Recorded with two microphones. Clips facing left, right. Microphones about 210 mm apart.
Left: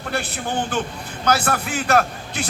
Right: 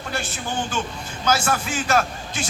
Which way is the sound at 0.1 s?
60° left (ahead or behind).